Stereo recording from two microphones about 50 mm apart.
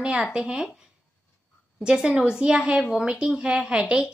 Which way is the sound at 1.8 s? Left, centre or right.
Centre.